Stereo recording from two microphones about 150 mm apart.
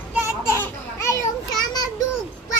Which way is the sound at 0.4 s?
20° left (ahead or behind).